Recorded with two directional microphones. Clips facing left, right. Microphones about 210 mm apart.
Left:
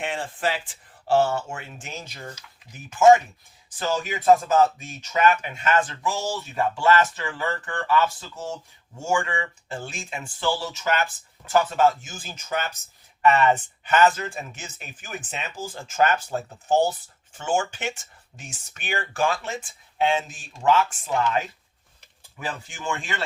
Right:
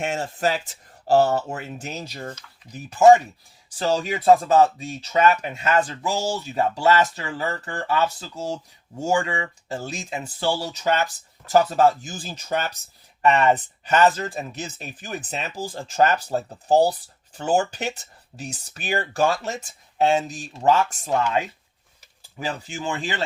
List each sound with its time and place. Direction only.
0.0 s speech: 45° right (ahead or behind)
22.7 s speech: 35° right (ahead or behind)